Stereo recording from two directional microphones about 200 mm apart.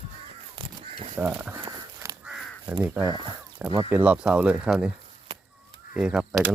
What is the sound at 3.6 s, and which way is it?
Speech, 5° right (ahead or behind).